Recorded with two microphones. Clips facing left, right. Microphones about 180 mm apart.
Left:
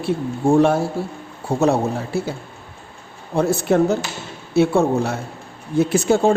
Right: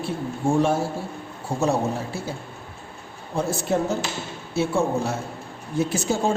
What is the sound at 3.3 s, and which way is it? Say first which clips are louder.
A man's voice: left 6 dB; 65° left (ahead or behind).